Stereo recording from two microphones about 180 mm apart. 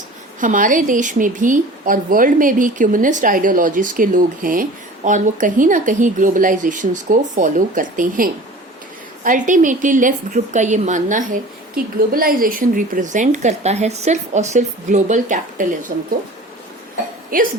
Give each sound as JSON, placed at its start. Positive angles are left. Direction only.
{"t": 0.3, "sound": "a woman's voice", "side_deg": -45}
{"t": 17.3, "sound": "a woman's voice", "side_deg": -50}